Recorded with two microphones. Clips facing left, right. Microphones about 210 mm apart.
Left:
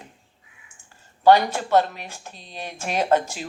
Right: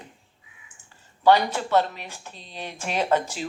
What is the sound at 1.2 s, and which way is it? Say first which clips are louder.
Speech: left 3 dB; 45° left (ahead or behind).